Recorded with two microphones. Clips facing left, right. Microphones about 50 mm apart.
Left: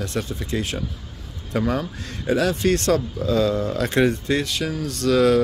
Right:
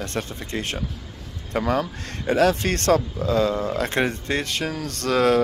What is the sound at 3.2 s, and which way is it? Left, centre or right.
Speech, right.